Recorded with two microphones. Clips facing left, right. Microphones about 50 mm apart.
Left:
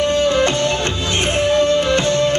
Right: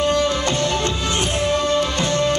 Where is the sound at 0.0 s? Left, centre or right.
Left.